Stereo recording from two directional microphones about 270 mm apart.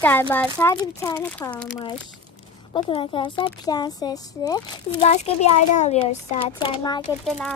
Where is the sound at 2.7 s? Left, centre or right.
Centre.